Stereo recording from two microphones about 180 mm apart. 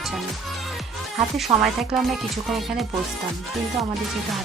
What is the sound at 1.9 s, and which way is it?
Music, centre (ahead or behind).